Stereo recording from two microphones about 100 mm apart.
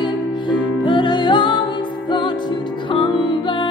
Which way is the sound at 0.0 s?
50° left (ahead or behind).